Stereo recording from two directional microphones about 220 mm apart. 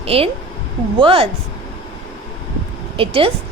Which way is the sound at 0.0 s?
25° right (ahead or behind).